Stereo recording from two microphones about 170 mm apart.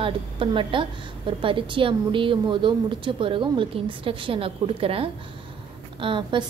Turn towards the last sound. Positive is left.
turn(degrees=-30)  # may be behind; listen again after turning